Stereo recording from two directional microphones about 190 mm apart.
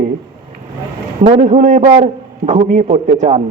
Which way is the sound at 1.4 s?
40° right (ahead or behind).